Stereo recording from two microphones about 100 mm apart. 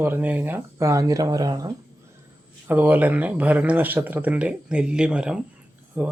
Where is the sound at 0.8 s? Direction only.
30° right (ahead or behind).